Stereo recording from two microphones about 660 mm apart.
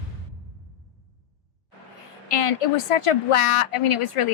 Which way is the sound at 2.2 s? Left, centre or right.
Left.